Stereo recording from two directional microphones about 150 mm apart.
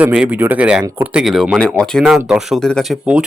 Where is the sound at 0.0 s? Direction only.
10° right (ahead or behind).